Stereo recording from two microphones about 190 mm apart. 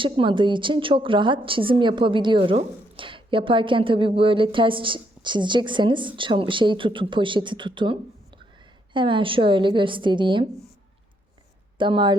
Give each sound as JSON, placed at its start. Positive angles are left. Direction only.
{"t": 0.0, "sound": "a woman's voice", "side_deg": -25}
{"t": 11.8, "sound": "a woman's voice", "side_deg": -25}